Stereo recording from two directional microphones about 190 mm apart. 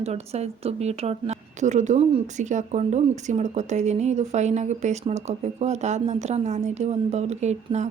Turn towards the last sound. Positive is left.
turn(degrees=-35)  # may be behind; listen again after turning